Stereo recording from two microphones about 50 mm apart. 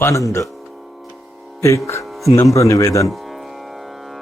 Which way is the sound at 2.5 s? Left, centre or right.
Left.